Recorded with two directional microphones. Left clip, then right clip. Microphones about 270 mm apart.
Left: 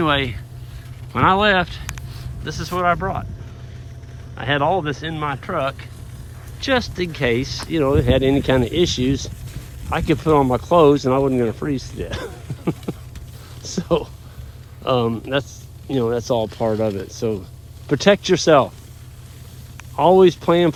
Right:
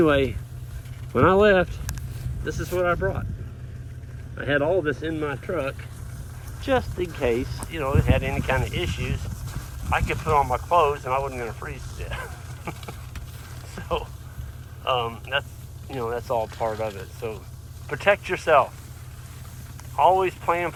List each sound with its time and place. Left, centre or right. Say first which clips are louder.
0.0 s speech: left 1 dB; centre
4.4 s speech: left 4 dB; centre
7.7 s speech: left 8 dB; left
20.0 s speech: left 6 dB; left